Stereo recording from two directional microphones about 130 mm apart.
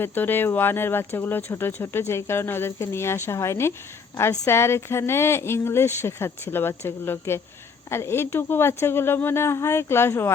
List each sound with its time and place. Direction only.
0.0 s speech: 15° left (ahead or behind)